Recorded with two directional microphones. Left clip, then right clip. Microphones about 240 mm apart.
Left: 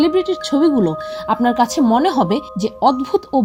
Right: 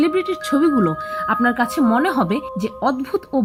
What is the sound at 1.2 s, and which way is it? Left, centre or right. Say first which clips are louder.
A woman's voice: left 3 dB; centre.